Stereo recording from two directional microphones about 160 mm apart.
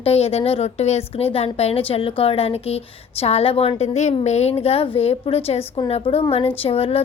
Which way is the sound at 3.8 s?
45° left (ahead or behind).